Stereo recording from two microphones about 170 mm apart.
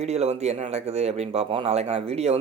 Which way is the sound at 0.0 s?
40° right (ahead or behind).